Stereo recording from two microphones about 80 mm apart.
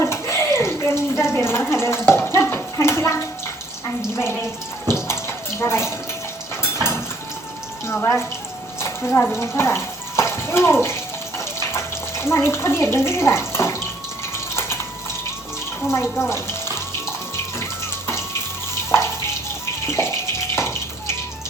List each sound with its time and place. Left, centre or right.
0.0 s bathtub: left
1.7 s speech: left
2.0 s a sound: left
5.0 s bathtub: left
8.8 s a sound: left
9.4 s bathtub: left
15.9 s speech: left
17.6 s water: left
18.9 s water tap: left
19.6 s water: left